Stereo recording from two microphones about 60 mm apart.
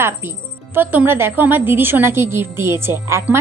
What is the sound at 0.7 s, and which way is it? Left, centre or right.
A woman's voice, right.